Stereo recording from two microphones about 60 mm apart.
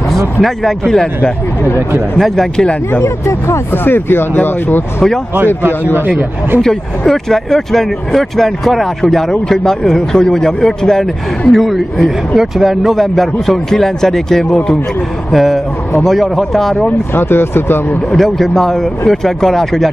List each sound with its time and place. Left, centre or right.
0.4 s a man's voice: centre
3.0 s speech: left
3.7 s speech: left
5.9 s speech: right
6.6 s a man's voice: centre
15.3 s speech: centre
17.1 s speech: left
18.1 s speech: centre